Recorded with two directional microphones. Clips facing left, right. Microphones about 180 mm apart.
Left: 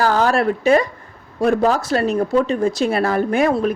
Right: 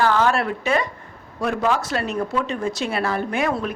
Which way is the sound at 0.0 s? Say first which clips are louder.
Left 3 dB; 40° left (ahead or behind).